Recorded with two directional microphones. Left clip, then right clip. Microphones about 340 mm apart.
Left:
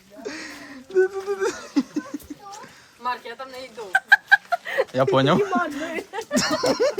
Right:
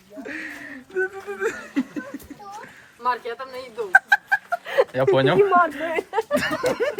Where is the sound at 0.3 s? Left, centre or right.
Centre.